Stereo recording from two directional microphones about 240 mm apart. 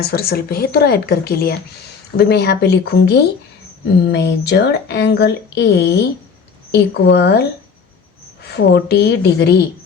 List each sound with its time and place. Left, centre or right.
0.0 s speech: left
8.4 s speech: left